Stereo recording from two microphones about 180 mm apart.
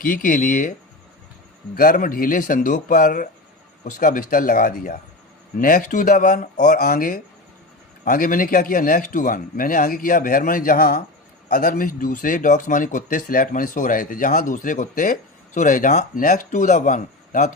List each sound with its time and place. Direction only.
0.0 s speech: 50° left (ahead or behind)
1.7 s speech: 50° left (ahead or behind)